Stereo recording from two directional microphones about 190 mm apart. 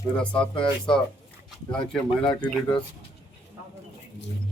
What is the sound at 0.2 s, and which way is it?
Speech, 5° left (ahead or behind).